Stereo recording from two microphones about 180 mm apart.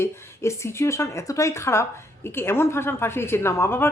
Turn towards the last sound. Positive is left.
turn(degrees=15)  # may be behind; listen again after turning